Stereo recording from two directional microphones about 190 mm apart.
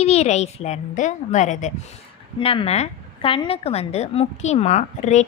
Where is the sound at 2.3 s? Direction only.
30° left (ahead or behind).